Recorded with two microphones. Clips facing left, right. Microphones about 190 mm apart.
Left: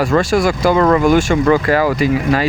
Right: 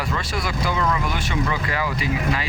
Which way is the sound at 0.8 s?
55° left (ahead or behind).